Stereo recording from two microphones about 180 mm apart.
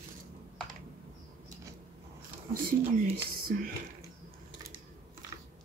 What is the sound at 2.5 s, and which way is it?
Speech, 55° right (ahead or behind).